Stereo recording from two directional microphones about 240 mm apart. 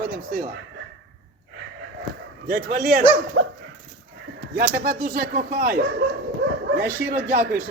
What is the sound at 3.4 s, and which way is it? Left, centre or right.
Dog, right.